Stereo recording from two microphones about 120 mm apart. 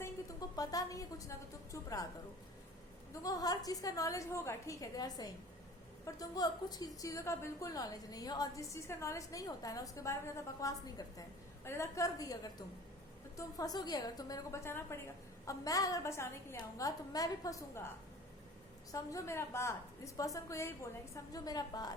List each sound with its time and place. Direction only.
0.0 s a woman's voice: 30° left (ahead or behind)
3.1 s a woman's voice: 30° left (ahead or behind)